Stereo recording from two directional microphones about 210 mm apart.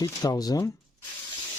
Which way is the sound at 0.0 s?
20° left (ahead or behind).